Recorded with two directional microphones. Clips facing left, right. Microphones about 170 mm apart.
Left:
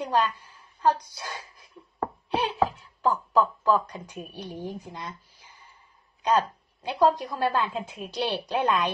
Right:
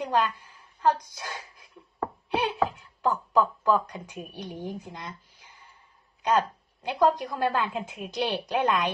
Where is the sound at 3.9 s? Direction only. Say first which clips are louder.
Even; 15° right (ahead or behind).